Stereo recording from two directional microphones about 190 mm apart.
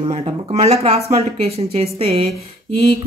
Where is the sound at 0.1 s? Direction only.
35° right (ahead or behind).